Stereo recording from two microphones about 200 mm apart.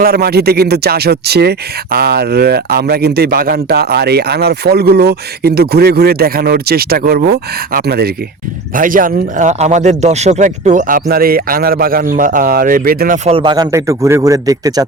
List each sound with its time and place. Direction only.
0.0 s speech: 50° right (ahead or behind)
13.2 s speech: 25° right (ahead or behind)